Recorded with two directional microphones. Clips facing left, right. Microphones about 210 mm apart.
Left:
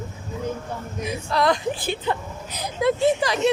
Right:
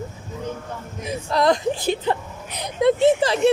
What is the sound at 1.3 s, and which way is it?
Speech, 25° right (ahead or behind).